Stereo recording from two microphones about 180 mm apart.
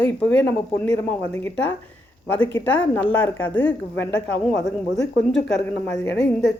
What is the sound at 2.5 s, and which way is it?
Speech, 10° left (ahead or behind).